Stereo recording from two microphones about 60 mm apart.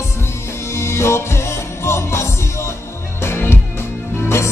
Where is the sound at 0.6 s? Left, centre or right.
Left.